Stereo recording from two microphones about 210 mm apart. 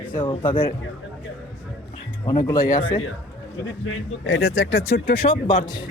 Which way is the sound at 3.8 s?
60° left (ahead or behind).